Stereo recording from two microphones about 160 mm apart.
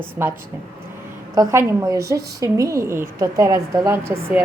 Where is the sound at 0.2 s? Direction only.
15° right (ahead or behind).